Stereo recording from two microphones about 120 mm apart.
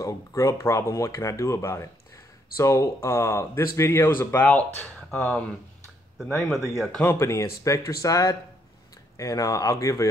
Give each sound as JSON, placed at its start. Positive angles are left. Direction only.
{"t": 0.0, "sound": "speech", "side_deg": 25}
{"t": 6.2, "sound": "speech", "side_deg": 0}
{"t": 7.2, "sound": "speech", "side_deg": 25}